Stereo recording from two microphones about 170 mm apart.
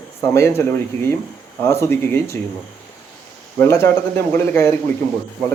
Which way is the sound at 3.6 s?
15° left (ahead or behind).